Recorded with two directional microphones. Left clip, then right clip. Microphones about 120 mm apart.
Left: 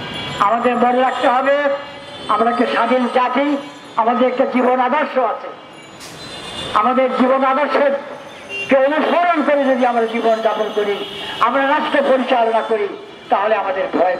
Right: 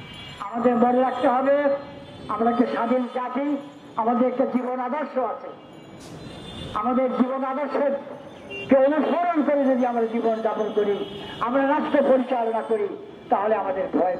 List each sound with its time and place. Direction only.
0.4 s a man's voice: 25° left (ahead or behind)
6.7 s a man's voice: 25° left (ahead or behind)